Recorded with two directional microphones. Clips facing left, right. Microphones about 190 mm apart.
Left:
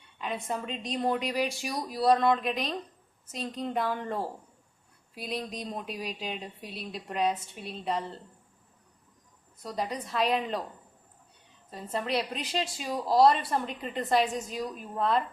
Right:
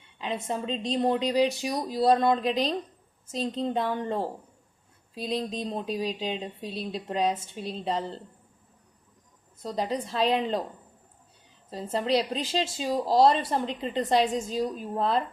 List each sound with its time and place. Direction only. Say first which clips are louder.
0.2 s a woman's voice: right 3 dB; 25° right (ahead or behind)
9.6 s a woman's voice: right 4 dB; 25° right (ahead or behind)
11.7 s a woman's voice: right 5 dB; 30° right (ahead or behind)